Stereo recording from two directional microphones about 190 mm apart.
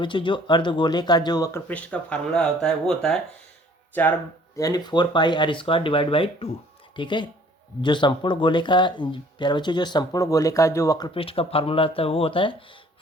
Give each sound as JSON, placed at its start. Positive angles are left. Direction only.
{"t": 0.0, "sound": "speech", "side_deg": 25}
{"t": 4.5, "sound": "speech", "side_deg": 20}